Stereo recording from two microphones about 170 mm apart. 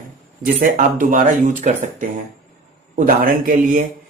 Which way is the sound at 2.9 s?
55° right (ahead or behind).